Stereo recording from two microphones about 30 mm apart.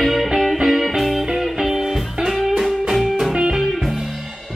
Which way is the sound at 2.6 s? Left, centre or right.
Centre.